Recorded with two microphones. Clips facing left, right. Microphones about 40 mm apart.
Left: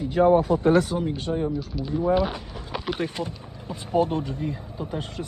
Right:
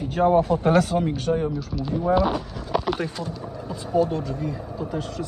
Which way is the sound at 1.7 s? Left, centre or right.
Centre.